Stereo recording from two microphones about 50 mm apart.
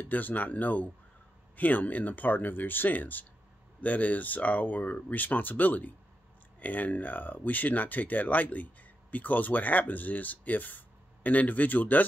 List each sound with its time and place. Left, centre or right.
0.0 s speech: left